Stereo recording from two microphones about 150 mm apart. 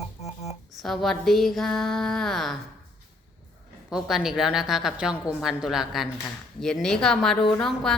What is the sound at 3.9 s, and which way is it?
A woman's voice, centre (ahead or behind).